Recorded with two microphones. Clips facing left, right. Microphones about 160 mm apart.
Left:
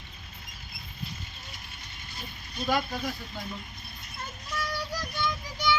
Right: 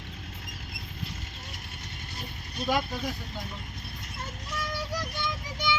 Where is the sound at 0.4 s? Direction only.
90° right.